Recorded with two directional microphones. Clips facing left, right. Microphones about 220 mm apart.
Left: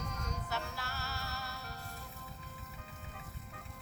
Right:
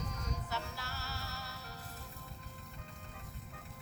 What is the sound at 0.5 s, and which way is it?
Music, 60° left (ahead or behind).